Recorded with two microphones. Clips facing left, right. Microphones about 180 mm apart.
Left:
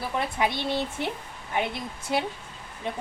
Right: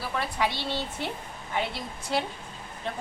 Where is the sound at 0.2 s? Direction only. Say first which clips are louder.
Left 2 dB; 20° left (ahead or behind).